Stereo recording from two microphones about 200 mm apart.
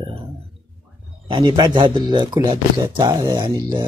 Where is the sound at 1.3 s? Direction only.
20° right (ahead or behind).